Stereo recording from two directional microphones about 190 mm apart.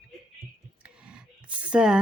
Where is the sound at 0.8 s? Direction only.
5° right (ahead or behind).